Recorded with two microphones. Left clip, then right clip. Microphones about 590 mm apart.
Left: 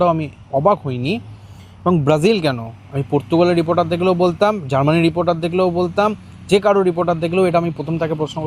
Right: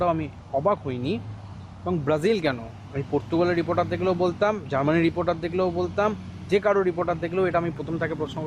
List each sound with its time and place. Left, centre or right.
0.2 s a man's voice: left